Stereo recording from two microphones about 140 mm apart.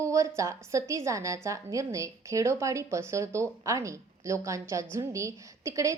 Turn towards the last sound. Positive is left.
turn(degrees=-20)  # may be behind; listen again after turning